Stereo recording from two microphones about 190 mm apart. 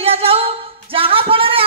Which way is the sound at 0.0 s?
30° right (ahead or behind).